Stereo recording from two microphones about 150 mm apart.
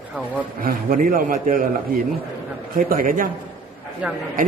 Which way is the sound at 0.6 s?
70° right (ahead or behind).